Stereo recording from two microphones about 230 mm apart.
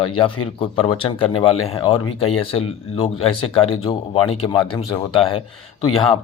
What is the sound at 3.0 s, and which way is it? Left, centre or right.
Speech, left.